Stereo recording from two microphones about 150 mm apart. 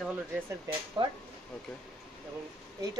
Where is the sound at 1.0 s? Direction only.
35° right (ahead or behind).